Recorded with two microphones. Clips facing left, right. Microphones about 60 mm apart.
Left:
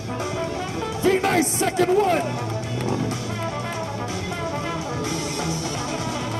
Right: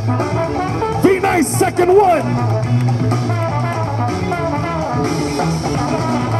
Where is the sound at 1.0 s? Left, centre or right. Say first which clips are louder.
Right 6 dB; right.